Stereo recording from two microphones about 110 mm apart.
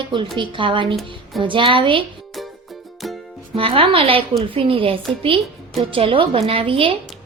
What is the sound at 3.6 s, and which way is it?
A woman's voice, 55° right (ahead or behind).